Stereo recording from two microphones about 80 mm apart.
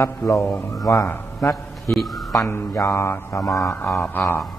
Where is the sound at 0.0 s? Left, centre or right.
Left.